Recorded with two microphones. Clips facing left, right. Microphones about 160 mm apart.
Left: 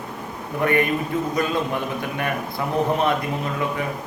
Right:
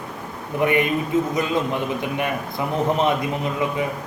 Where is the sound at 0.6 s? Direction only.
15° right (ahead or behind).